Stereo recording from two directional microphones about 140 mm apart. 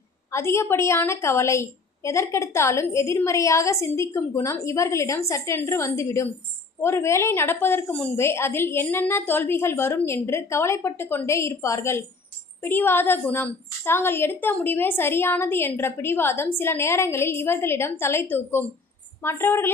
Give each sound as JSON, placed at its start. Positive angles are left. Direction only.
{"t": 0.3, "sound": "a woman's voice", "side_deg": 20}